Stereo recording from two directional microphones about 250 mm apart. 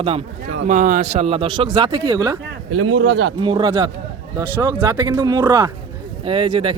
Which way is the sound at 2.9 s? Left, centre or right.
Right.